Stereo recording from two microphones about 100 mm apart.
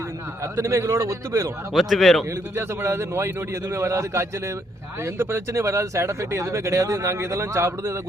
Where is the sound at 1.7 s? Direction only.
Centre (ahead or behind).